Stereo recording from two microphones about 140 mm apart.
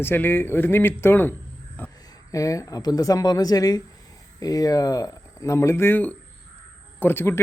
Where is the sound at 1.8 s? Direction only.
15° left (ahead or behind).